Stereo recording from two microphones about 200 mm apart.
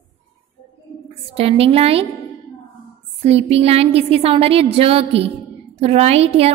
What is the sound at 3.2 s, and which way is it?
Music, 30° right (ahead or behind).